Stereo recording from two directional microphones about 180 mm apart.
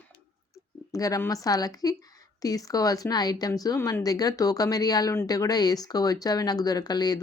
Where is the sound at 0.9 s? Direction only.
20° left (ahead or behind).